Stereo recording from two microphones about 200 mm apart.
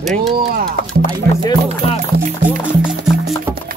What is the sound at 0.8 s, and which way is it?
Speech, 45° left (ahead or behind).